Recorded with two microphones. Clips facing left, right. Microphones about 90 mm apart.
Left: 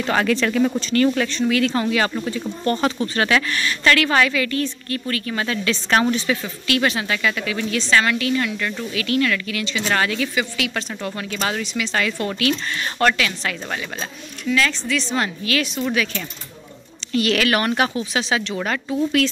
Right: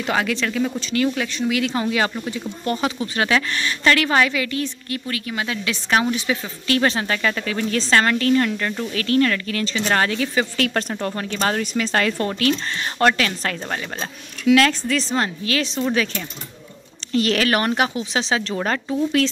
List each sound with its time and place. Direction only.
0.0 s speech: 10° right (ahead or behind)
1.5 s a woman's voice: 15° right (ahead or behind)
6.7 s a woman's voice: 35° right (ahead or behind)
10.6 s a woman's voice: 45° right (ahead or behind)
15.1 s a woman's voice: 30° right (ahead or behind)
17.1 s speech: 30° right (ahead or behind)